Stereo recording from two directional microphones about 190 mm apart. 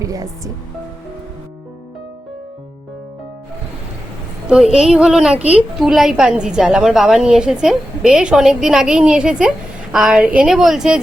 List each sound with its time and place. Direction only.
0.0 s speech: 20° right (ahead or behind)
4.4 s a woman's voice: 5° right (ahead or behind)